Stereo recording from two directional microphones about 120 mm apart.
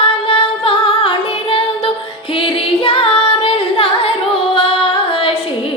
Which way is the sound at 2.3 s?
50° left (ahead or behind).